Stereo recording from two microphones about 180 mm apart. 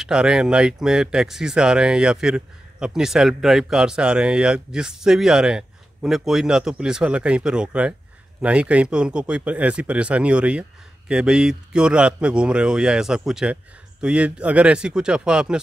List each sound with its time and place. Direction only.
0.0 s speech: 5° right (ahead or behind)